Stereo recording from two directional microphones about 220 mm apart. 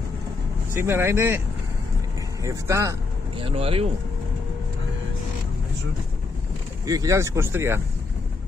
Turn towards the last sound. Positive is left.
turn(degrees=-10)  # may be behind; listen again after turning